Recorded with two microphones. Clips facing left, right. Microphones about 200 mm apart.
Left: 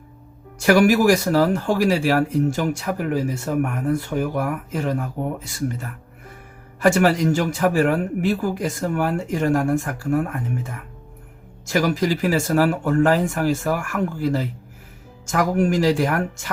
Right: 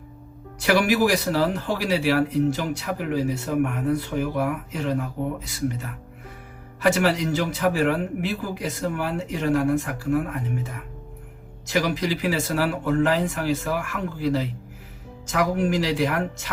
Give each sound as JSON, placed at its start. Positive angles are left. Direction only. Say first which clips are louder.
{"t": 0.6, "sound": "speech", "louder": "left 5 dB", "side_deg": 45}